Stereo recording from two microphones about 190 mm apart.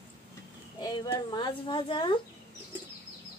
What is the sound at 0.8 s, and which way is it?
A woman's voice, 20° left (ahead or behind).